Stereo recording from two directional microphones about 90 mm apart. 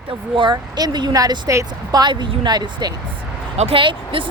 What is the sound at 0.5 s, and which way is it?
Speech, 50° right (ahead or behind).